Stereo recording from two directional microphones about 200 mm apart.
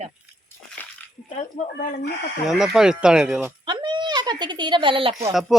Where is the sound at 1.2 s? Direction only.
35° left (ahead or behind).